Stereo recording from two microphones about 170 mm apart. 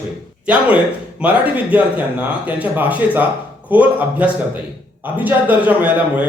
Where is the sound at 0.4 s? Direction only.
10° right (ahead or behind).